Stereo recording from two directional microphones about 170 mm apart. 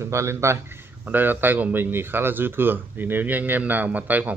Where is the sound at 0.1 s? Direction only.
15° right (ahead or behind).